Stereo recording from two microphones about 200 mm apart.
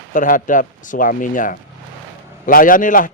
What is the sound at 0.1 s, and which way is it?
A man's voice, 40° left (ahead or behind).